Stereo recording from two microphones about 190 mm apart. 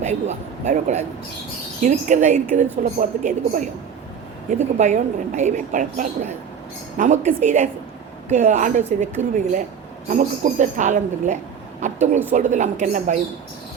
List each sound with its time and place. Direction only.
0.0 s a woman's voice: 35° right (ahead or behind)